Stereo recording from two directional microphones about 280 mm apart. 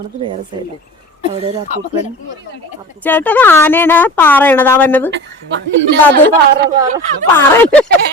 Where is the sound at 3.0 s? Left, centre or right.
Centre.